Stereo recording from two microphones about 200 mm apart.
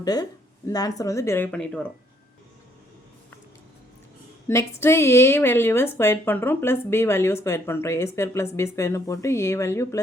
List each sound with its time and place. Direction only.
0.0 s a woman's voice: 20° left (ahead or behind)
4.4 s a woman's voice: 15° left (ahead or behind)